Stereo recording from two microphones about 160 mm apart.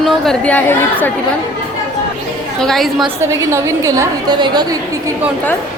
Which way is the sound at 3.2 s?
20° right (ahead or behind).